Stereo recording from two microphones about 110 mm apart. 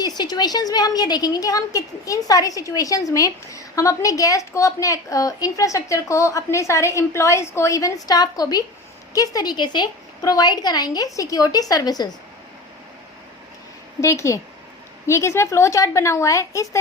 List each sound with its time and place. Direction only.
0.0 s a woman's voice: 40° left (ahead or behind)
14.0 s a woman's voice: 25° left (ahead or behind)